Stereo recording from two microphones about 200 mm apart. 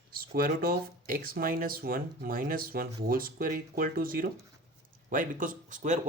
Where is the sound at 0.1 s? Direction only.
45° right (ahead or behind).